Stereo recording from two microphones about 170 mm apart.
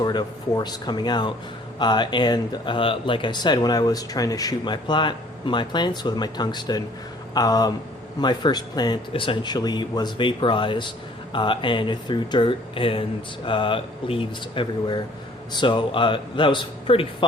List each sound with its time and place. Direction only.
0.0 s speech: 25° left (ahead or behind)